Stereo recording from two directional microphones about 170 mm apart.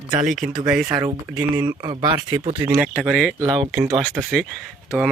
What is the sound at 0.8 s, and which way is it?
Speech, 25° right (ahead or behind).